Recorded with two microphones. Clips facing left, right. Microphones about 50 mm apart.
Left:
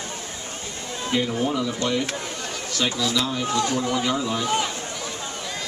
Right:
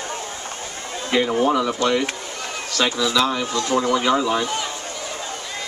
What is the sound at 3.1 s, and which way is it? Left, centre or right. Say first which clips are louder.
Speech: right 5 dB; right.